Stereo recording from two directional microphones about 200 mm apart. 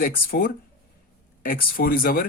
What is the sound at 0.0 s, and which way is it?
Speech, 45° left (ahead or behind).